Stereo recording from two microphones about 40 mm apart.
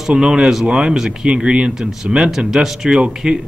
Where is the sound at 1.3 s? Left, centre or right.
Right.